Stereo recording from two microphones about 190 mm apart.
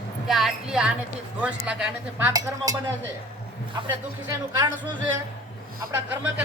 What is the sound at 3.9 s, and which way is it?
Speech, 15° right (ahead or behind).